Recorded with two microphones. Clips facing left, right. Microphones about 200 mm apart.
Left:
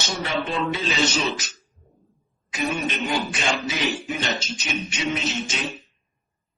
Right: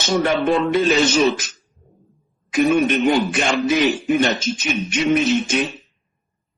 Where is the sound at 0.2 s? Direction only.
55° right (ahead or behind).